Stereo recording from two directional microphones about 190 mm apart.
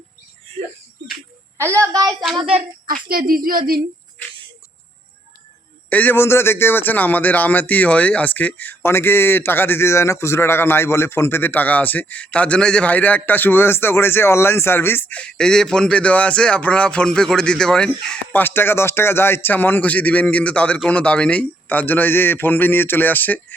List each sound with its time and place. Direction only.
1.5 s a woman's voice: 15° right (ahead or behind)
2.3 s a woman's voice: 30° right (ahead or behind)
2.8 s a woman's voice: 50° right (ahead or behind)
5.9 s a man's voice: 10° left (ahead or behind)